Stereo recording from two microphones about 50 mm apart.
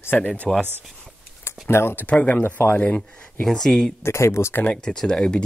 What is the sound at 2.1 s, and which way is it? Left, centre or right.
Speech, left.